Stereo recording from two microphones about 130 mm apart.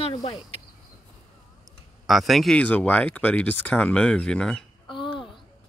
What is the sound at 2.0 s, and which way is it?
Speech, centre (ahead or behind).